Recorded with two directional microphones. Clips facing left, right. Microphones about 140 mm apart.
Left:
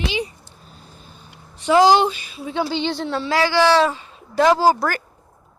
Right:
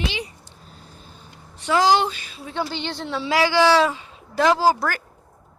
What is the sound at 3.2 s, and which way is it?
A woman's voice, 15° right (ahead or behind).